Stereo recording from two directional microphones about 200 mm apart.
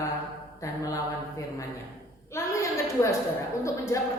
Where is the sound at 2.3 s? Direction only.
15° left (ahead or behind).